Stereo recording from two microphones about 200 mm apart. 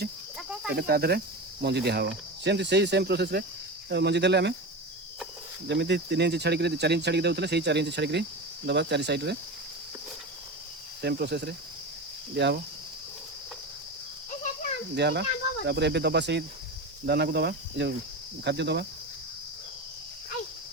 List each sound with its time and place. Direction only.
0.8 s speech: 50° right (ahead or behind)
5.6 s speech: 60° right (ahead or behind)
11.0 s speech: 55° right (ahead or behind)
14.9 s speech: 55° right (ahead or behind)